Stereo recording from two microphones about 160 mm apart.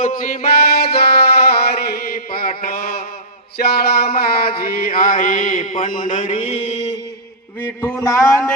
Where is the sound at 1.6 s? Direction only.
75° left (ahead or behind).